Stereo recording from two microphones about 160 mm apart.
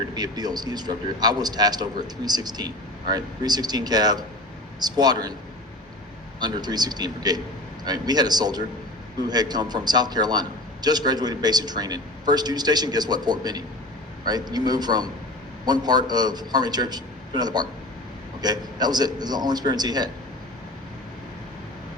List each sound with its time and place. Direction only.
0.1 s a man's voice: 25° right (ahead or behind)
6.4 s a man's voice: 25° right (ahead or behind)